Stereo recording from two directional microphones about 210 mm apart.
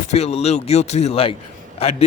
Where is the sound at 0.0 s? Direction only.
30° left (ahead or behind).